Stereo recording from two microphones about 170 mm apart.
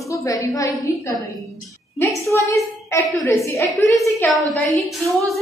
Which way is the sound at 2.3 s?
15° left (ahead or behind).